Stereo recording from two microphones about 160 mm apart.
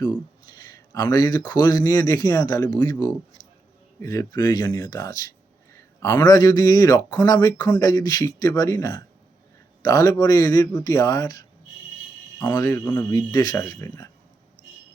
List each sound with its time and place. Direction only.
0.9 s a man's voice: 25° left (ahead or behind)
12.5 s a man's voice: 20° left (ahead or behind)